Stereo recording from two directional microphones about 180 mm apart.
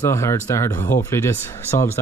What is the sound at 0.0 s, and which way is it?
Speech, 15° left (ahead or behind).